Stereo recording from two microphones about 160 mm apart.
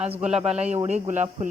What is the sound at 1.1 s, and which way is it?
Speech, 45° right (ahead or behind).